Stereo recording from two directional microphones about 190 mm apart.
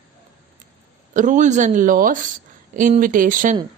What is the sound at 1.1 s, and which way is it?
Speech, 40° right (ahead or behind).